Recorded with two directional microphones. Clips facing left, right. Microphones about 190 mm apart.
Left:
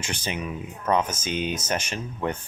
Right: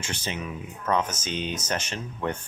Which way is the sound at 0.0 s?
15° left (ahead or behind).